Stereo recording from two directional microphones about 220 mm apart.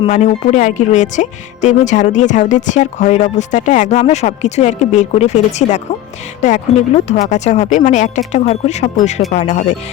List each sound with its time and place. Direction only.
0.1 s a woman's voice: 35° left (ahead or behind)